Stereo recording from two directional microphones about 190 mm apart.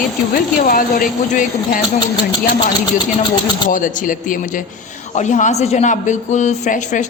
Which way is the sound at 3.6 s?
45° left (ahead or behind).